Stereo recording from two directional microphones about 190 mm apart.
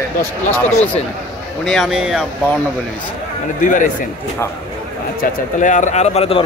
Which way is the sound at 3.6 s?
45° left (ahead or behind).